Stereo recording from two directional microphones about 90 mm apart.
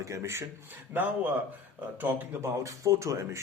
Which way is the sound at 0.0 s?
35° right (ahead or behind).